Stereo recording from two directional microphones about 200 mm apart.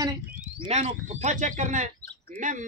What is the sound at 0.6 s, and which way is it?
Speech, 35° right (ahead or behind).